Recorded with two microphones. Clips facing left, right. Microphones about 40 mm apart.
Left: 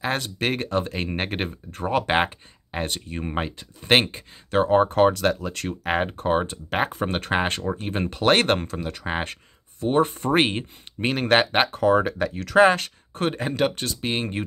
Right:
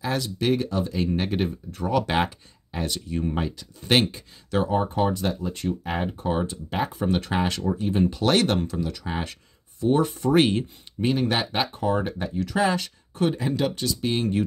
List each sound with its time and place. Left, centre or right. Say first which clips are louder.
0.0 s speech: even; left
4.7 s speech: left 8 dB; left
11.0 s speech: left 4 dB; left
11.7 s speech: left 5 dB; left